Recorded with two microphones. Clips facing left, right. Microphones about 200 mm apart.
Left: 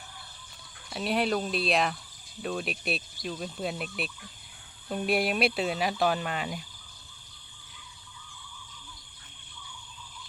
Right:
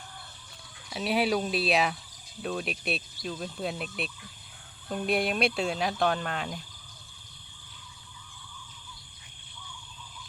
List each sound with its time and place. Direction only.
0.9 s speech: centre (ahead or behind)